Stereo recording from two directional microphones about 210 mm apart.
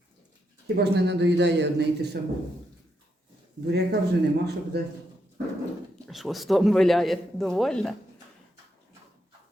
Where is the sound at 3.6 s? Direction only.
50° right (ahead or behind).